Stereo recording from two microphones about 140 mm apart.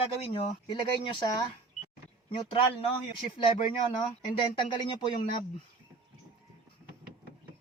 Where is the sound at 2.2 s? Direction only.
40° left (ahead or behind).